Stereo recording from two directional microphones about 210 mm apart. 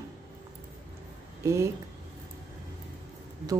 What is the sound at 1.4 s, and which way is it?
Speech, 15° right (ahead or behind).